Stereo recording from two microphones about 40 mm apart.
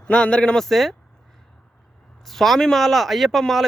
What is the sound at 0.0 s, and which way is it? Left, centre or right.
Speech, left.